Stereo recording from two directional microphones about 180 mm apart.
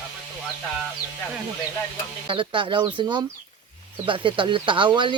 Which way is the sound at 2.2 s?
30° right (ahead or behind).